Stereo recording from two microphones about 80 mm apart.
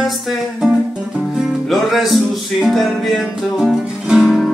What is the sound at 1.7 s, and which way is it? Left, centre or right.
Music, centre.